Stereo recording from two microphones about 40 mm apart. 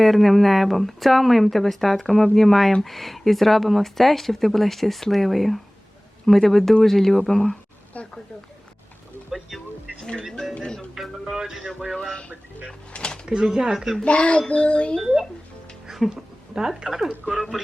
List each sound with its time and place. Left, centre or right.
0.0 s speech: centre
7.9 s a woman's voice: left
10.9 s music: centre
12.9 s a sound: left
13.2 s speech: centre
14.0 s speech: left
15.9 s music: centre
16.6 s speech: centre